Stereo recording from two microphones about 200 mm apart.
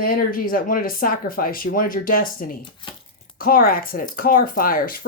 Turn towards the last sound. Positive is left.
turn(degrees=45)  # may be behind; listen again after turning